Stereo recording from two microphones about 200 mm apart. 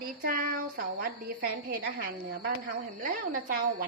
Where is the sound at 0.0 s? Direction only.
45° right (ahead or behind).